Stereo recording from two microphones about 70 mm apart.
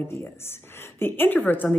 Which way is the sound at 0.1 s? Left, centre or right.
Left.